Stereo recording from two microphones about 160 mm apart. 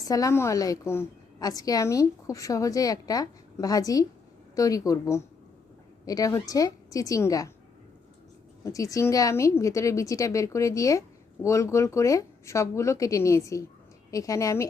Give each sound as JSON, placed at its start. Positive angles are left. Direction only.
{"t": 0.0, "sound": "a woman's voice", "side_deg": 20}
{"t": 8.6, "sound": "a woman's voice", "side_deg": 20}